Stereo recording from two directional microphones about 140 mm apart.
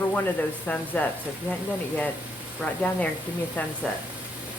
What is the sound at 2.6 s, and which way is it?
Speech, 10° left (ahead or behind).